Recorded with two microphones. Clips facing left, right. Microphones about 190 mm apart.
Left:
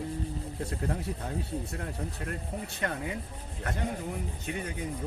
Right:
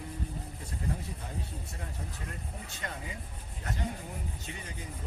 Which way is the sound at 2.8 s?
65° left (ahead or behind).